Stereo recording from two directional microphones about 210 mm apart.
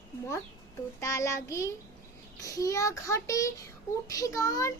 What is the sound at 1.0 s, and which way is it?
Child singing, 15° left (ahead or behind).